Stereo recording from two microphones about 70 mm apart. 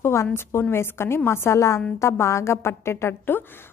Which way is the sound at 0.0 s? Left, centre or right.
Left.